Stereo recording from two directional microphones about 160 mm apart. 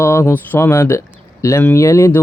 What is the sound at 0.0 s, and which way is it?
Speech, 15° left (ahead or behind).